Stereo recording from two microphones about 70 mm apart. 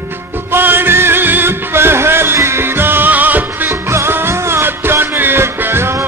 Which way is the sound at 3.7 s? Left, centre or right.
Right.